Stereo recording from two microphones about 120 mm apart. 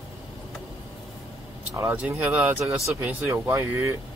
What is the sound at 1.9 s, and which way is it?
Speech, 15° right (ahead or behind).